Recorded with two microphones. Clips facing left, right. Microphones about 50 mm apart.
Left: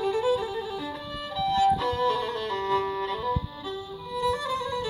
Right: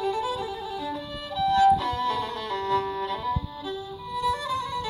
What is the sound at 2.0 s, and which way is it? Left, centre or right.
Music, centre.